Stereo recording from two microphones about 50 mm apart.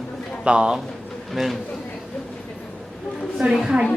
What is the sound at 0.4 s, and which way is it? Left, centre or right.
Speech, centre.